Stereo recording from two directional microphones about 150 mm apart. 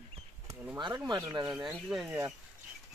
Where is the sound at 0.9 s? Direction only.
20° right (ahead or behind).